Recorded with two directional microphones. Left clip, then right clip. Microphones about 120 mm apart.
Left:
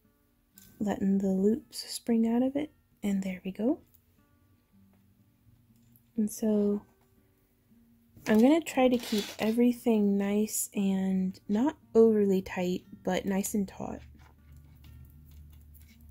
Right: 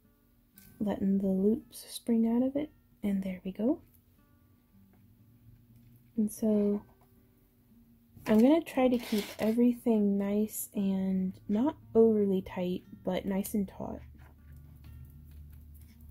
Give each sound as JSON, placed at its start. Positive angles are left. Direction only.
{"t": 0.8, "sound": "speech", "side_deg": 20}
{"t": 6.1, "sound": "speech", "side_deg": 20}
{"t": 8.3, "sound": "speech", "side_deg": 20}
{"t": 9.1, "sound": "speech", "side_deg": 0}
{"t": 9.4, "sound": "speech", "side_deg": 20}
{"t": 11.9, "sound": "speech", "side_deg": 30}